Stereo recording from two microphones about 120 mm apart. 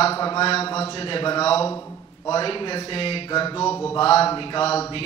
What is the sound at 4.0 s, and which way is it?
Speech, 55° left (ahead or behind).